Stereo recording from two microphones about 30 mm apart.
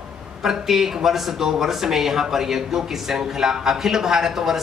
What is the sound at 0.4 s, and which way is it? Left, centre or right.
Speech, centre.